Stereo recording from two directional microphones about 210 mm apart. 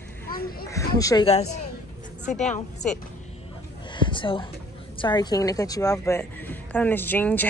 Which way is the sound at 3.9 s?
20° left (ahead or behind).